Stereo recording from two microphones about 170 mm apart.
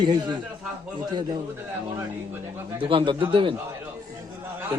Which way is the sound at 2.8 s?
30° right (ahead or behind).